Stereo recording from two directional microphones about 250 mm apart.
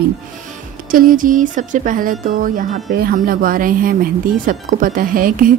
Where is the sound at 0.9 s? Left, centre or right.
Right.